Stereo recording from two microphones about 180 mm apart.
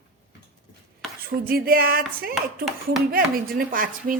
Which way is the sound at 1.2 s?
55° right (ahead or behind).